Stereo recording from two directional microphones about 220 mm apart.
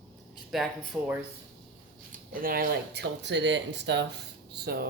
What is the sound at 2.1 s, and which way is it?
A woman's voice, 40° right (ahead or behind).